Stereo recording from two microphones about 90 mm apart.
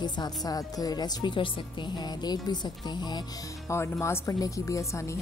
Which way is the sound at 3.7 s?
30° left (ahead or behind).